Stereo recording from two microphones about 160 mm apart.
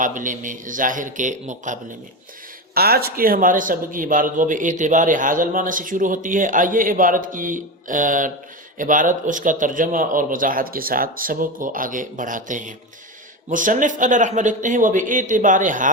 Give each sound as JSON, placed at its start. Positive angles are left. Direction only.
{"t": 0.0, "sound": "speech", "side_deg": -55}
{"t": 2.7, "sound": "speech", "side_deg": -75}